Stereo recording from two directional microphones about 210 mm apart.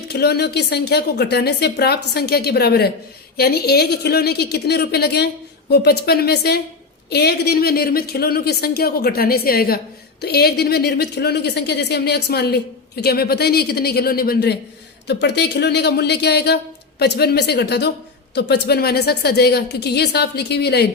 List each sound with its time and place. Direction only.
0.1 s speech: 50° left (ahead or behind)